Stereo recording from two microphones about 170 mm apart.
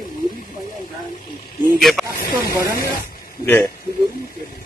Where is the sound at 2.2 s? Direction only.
20° left (ahead or behind).